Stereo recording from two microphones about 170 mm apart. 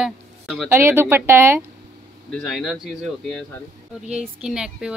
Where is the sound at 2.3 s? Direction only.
5° left (ahead or behind).